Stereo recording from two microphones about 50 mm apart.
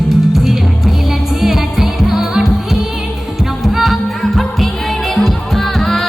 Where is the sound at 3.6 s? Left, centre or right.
Centre.